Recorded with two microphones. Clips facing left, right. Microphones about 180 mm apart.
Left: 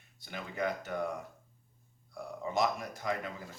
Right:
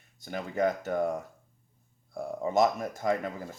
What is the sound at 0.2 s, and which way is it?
Speech, 45° right (ahead or behind).